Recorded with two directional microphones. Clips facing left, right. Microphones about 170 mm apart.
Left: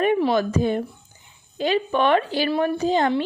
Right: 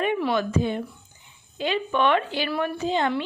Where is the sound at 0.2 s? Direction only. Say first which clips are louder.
Left 3 dB; 35° left (ahead or behind).